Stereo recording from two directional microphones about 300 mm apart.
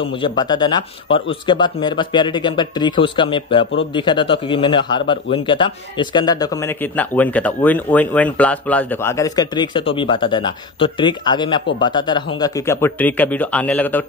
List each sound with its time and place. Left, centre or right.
0.0 s speech: centre